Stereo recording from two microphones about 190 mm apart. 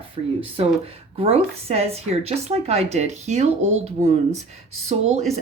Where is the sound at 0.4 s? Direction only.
30° right (ahead or behind).